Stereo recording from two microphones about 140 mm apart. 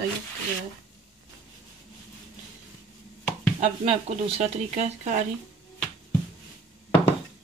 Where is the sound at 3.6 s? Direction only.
50° right (ahead or behind).